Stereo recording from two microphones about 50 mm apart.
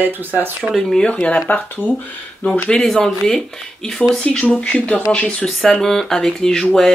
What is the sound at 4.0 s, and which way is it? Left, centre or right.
Speech, left.